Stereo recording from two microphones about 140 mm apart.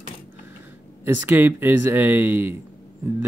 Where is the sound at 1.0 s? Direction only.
15° right (ahead or behind).